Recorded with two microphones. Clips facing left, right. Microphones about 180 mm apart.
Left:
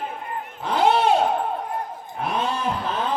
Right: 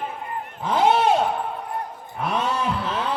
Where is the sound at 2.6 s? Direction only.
45° left (ahead or behind).